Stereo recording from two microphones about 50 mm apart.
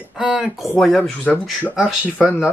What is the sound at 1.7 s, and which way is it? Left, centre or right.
Speech, centre.